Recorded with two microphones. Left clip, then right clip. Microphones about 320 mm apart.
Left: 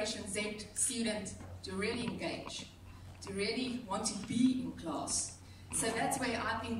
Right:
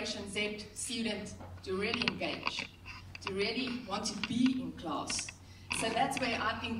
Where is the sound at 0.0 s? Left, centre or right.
Centre.